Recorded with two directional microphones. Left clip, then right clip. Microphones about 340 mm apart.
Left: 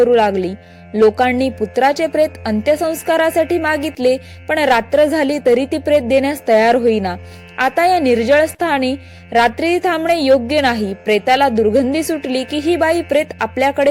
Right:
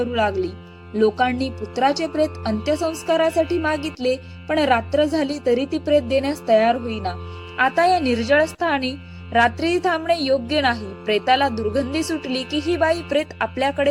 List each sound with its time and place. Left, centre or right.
0.1 s a woman's voice: centre